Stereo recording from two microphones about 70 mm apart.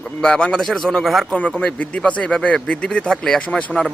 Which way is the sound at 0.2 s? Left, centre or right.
Centre.